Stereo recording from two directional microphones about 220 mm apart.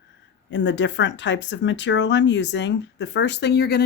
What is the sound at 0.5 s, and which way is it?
Speech, 55° left (ahead or behind).